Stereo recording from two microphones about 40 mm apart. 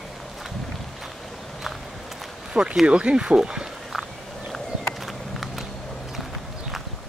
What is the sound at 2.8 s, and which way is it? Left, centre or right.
Speech, right.